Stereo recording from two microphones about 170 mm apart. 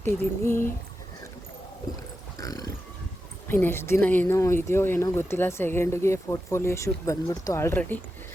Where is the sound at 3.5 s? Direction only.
10° left (ahead or behind).